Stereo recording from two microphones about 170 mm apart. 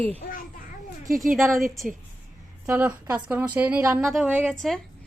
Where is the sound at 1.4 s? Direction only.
Centre (ahead or behind).